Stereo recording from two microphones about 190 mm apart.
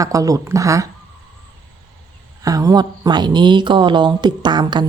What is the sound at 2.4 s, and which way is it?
Speech, 20° right (ahead or behind).